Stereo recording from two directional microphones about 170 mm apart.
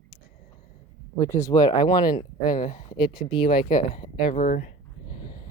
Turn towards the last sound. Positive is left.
turn(degrees=50)  # may be behind; listen again after turning